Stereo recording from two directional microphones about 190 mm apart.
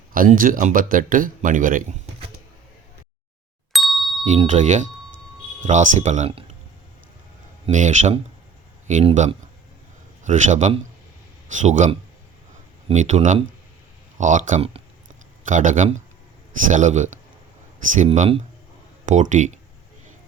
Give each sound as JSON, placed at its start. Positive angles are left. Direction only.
{"t": 0.1, "sound": "speech", "side_deg": -45}
{"t": 3.7, "sound": "ding", "side_deg": 0}
{"t": 4.3, "sound": "speech", "side_deg": -40}
{"t": 7.7, "sound": "speech", "side_deg": -40}
{"t": 12.9, "sound": "speech", "side_deg": -35}